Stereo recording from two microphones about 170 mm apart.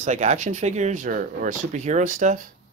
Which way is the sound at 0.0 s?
45° right (ahead or behind).